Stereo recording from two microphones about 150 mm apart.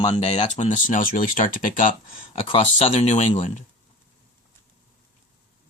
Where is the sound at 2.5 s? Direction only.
40° left (ahead or behind).